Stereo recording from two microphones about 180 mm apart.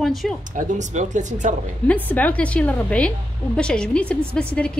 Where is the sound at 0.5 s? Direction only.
45° right (ahead or behind).